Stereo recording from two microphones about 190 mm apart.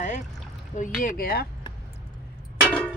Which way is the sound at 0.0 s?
40° left (ahead or behind).